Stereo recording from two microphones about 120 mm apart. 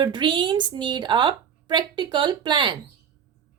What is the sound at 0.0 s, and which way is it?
A woman's voice, 40° right (ahead or behind).